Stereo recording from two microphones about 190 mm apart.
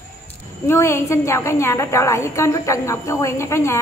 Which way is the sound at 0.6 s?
15° left (ahead or behind).